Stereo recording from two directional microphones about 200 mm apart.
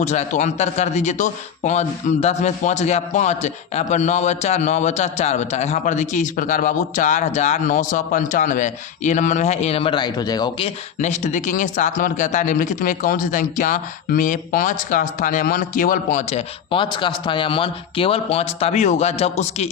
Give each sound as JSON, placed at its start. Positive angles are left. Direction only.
{"t": 0.0, "sound": "a man's voice", "side_deg": 35}
{"t": 11.0, "sound": "a man's voice", "side_deg": 35}
{"t": 16.7, "sound": "a man's voice", "side_deg": 25}